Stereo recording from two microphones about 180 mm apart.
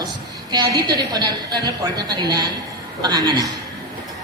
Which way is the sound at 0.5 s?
25° right (ahead or behind).